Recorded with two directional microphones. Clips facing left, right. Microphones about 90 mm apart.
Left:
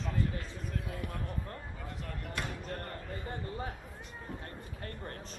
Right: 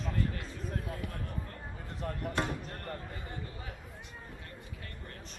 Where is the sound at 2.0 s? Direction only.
35° right (ahead or behind).